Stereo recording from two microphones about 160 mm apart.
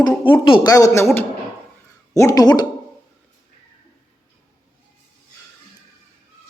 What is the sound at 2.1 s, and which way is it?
Speech, 20° left (ahead or behind).